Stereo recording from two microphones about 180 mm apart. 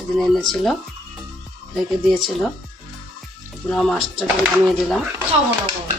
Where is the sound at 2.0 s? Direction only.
Centre (ahead or behind).